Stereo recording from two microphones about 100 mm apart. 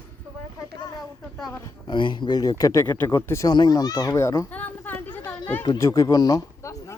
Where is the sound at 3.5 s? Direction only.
45° left (ahead or behind).